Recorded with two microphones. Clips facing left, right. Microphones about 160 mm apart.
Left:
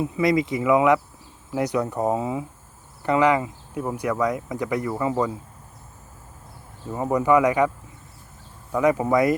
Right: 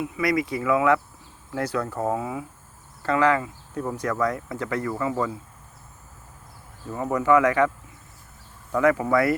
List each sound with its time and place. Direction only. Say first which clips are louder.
0.0 s speech: left 3 dB; 25° left (ahead or behind)
6.9 s speech: left 1 dB; 20° left (ahead or behind)
8.7 s speech: left 1 dB; 15° left (ahead or behind)